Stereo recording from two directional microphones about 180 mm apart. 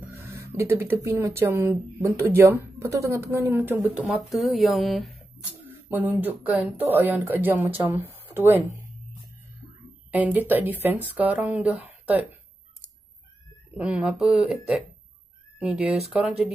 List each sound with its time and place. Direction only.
0.1 s speech: 10° right (ahead or behind)
5.9 s speech: 10° right (ahead or behind)
10.1 s speech: 10° right (ahead or behind)
13.7 s speech: 5° right (ahead or behind)
15.6 s speech: centre (ahead or behind)